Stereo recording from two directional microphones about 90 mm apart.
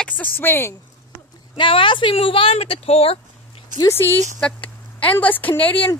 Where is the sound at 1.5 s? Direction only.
65° left (ahead or behind); by 3.2 s 90° left.